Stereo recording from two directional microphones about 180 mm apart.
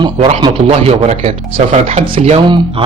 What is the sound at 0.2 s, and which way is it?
Speech, 35° right (ahead or behind).